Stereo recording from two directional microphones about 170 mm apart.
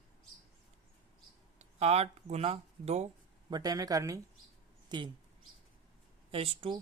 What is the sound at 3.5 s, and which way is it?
Speech, 25° right (ahead or behind).